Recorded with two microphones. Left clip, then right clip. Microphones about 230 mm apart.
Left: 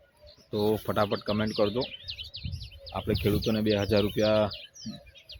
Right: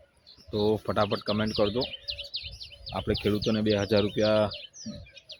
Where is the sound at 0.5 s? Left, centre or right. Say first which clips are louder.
Right 1 dB; centre.